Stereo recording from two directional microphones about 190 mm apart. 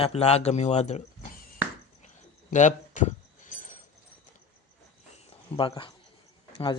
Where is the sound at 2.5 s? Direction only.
40° left (ahead or behind).